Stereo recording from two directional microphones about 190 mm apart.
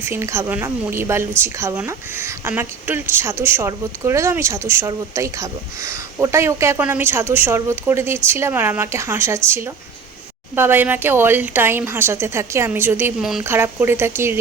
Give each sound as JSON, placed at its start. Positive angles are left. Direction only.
{"t": 0.0, "sound": "speech", "side_deg": -15}
{"t": 13.4, "sound": "speech", "side_deg": -10}